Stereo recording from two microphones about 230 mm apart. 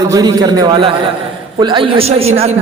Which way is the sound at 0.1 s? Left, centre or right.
Centre.